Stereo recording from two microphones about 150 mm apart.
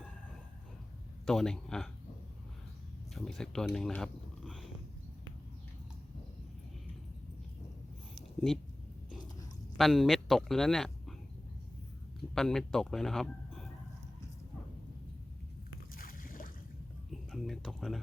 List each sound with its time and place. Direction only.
1.2 s a man's voice: 5° left (ahead or behind)
3.2 s a man's voice: 5° left (ahead or behind)
9.7 s a man's voice: centre (ahead or behind)
12.3 s speech: 5° left (ahead or behind)
16.0 s boat: 70° left (ahead or behind)
17.1 s speech: centre (ahead or behind)